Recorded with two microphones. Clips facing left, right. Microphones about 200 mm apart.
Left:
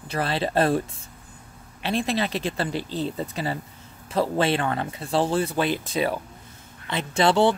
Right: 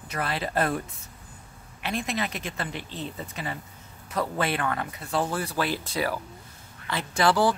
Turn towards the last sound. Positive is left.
turn(degrees=25)  # may be behind; listen again after turning